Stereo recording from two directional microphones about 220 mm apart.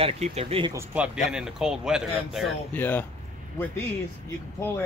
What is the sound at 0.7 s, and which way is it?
Speech, 10° right (ahead or behind).